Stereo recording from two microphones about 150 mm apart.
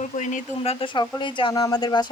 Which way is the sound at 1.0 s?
35° left (ahead or behind).